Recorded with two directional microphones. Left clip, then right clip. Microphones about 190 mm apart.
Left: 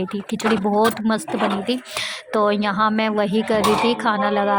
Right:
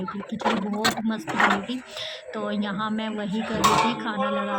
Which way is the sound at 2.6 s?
25° left (ahead or behind).